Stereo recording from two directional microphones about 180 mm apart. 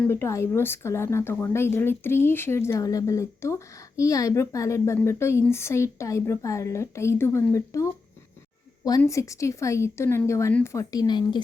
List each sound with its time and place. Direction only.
0.0 s speech: 15° left (ahead or behind)
9.0 s speech: 15° left (ahead or behind)